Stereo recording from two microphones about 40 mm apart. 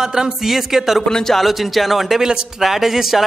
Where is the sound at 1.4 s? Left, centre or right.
Centre.